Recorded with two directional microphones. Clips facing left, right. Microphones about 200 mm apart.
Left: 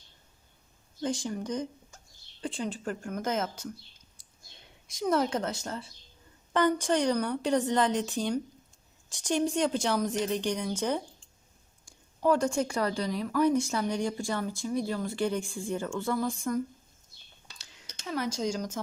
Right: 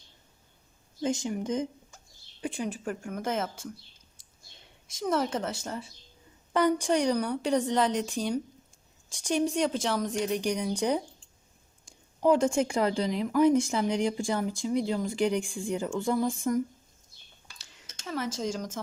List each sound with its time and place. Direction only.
1.0 s speech: 20° right (ahead or behind); by 3.7 s 5° right (ahead or behind)
4.9 s a woman's voice: centre (ahead or behind)
10.3 s speech: 15° right (ahead or behind)
12.2 s speech: 20° right (ahead or behind)
17.6 s a sound: centre (ahead or behind)